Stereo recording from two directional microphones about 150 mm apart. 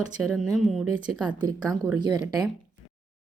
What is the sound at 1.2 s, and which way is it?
Speech, 30° right (ahead or behind).